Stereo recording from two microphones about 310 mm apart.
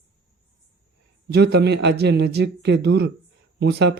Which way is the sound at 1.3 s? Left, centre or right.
Right.